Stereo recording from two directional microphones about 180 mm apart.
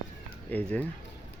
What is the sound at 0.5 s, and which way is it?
Speech, 10° left (ahead or behind).